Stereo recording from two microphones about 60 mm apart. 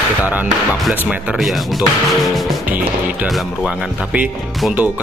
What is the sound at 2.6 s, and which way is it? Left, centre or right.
Speech, right.